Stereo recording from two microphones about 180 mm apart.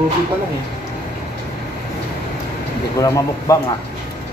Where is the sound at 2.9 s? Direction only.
20° left (ahead or behind).